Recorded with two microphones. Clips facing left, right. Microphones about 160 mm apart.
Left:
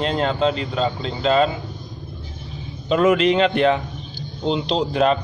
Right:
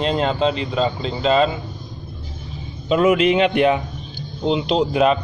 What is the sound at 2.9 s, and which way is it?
A man's voice, 10° right (ahead or behind).